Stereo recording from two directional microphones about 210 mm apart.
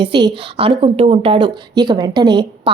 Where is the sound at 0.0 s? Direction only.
20° right (ahead or behind).